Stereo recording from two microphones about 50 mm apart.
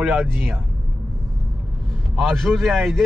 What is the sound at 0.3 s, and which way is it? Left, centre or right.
Speech, right.